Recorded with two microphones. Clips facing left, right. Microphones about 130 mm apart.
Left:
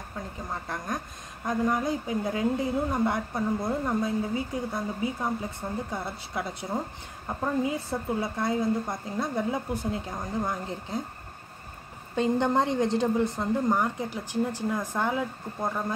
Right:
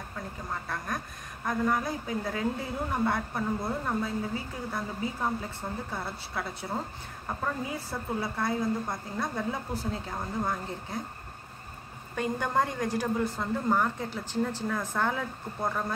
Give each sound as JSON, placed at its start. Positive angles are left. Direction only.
{"t": 0.5, "sound": "a woman's voice", "side_deg": 20}
{"t": 12.2, "sound": "a woman's voice", "side_deg": 20}